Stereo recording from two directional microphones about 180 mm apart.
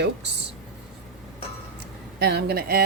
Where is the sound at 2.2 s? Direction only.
70° right (ahead or behind).